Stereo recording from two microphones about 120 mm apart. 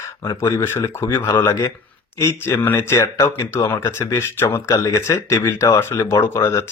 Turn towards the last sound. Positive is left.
turn(degrees=20)  # may be behind; listen again after turning